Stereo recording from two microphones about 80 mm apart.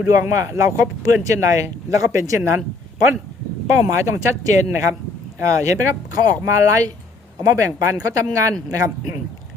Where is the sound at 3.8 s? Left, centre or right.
Right.